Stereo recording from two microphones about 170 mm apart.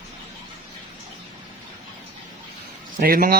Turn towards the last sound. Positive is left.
turn(degrees=-60)  # may be behind; listen again after turning